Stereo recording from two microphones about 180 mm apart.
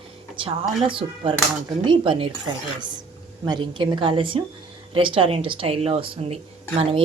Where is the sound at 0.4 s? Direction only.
30° right (ahead or behind).